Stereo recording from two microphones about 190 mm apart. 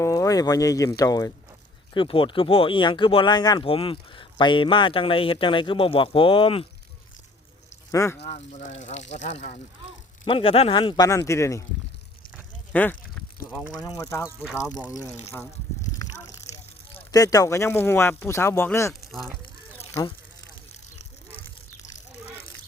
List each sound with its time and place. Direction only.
0.0 s speech: 15° left (ahead or behind)
7.9 s speech: 15° left (ahead or behind)
8.2 s speech: 35° left (ahead or behind)
10.2 s speech: 30° left (ahead or behind)
12.7 s speech: 10° left (ahead or behind)
16.9 s speech: 20° left (ahead or behind)